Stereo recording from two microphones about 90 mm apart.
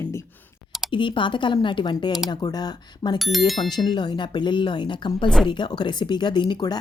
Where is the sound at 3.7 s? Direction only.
55° left (ahead or behind).